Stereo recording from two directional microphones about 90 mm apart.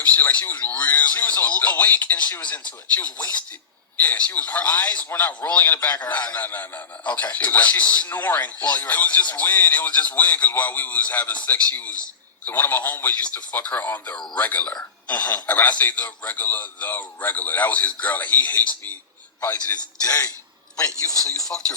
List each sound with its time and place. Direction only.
0.0 s a man's voice: 20° left (ahead or behind)
20.0 s a man's voice: 40° left (ahead or behind)